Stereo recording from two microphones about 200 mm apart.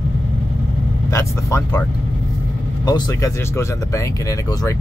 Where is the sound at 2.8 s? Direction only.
20° left (ahead or behind).